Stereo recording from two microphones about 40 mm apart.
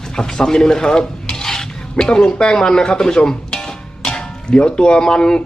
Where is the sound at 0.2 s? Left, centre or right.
Centre.